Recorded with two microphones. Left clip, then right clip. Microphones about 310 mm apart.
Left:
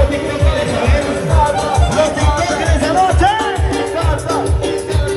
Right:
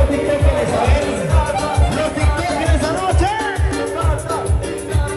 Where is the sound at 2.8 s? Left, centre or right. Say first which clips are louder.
Left 9 dB; left.